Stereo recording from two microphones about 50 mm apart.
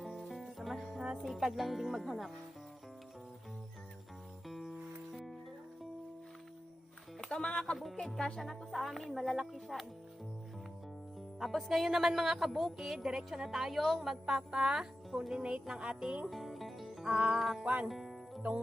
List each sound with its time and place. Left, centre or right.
0.3 s music: centre
1.5 s speech: centre
4.4 s music: centre
7.2 s speech: centre
8.1 s speech: centre
11.3 s speech: centre
16.2 s music: centre
17.2 s music: right
17.4 s speech: centre
17.8 s music: centre